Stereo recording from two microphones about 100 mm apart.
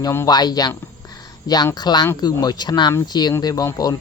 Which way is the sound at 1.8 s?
45° left (ahead or behind).